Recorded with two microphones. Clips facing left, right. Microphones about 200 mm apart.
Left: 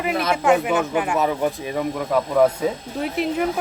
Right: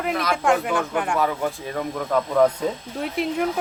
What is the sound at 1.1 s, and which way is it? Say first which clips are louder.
Speech: left 2 dB; 20° left (ahead or behind).